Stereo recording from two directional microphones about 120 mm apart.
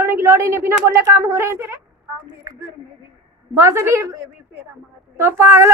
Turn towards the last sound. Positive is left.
turn(degrees=-25)  # may be behind; listen again after turning